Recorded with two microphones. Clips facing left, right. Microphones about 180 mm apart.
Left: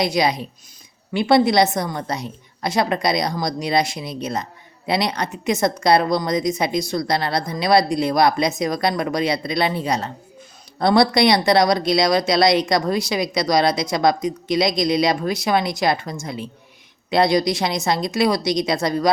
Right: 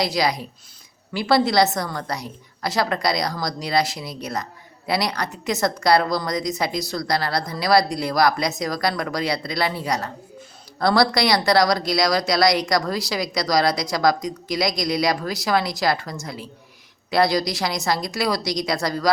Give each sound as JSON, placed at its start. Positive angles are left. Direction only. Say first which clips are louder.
{"t": 0.0, "sound": "a woman's voice", "louder": "left 3 dB", "side_deg": 20}